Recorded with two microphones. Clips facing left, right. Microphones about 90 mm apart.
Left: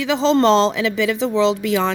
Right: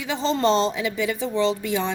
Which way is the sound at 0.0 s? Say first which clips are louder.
Left 7 dB; 90° left.